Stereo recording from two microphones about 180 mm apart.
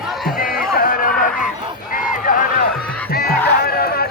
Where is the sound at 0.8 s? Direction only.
50° left (ahead or behind).